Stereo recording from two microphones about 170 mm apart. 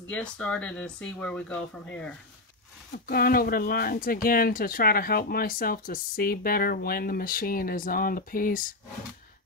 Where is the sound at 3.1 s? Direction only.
60° left (ahead or behind).